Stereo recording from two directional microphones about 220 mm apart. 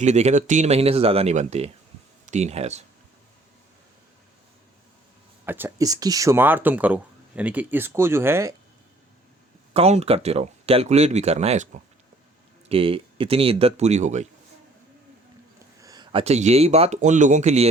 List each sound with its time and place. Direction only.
0.0 s speech: 30° right (ahead or behind)
5.5 s speech: 10° right (ahead or behind)
9.7 s speech: 30° right (ahead or behind)
15.5 s speech: 15° right (ahead or behind)